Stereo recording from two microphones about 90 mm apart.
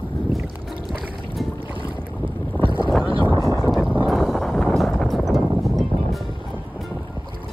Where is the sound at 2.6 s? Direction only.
65° right (ahead or behind).